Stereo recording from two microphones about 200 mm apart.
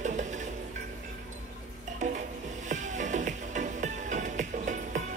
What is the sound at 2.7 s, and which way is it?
Music, 40° right (ahead or behind).